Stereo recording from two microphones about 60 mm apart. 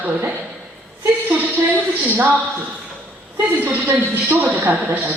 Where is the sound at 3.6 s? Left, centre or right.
Right.